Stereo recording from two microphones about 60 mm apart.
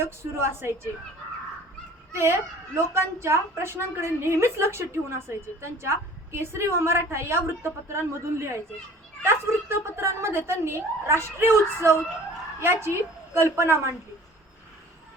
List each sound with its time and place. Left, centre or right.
0.0 s a woman's voice: right
2.7 s a woman's voice: right